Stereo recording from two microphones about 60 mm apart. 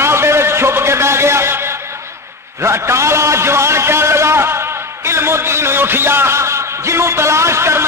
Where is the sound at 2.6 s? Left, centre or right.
Right.